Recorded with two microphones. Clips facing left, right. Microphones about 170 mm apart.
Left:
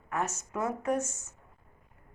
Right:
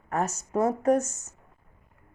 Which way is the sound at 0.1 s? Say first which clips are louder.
Right 5 dB; 35° right (ahead or behind).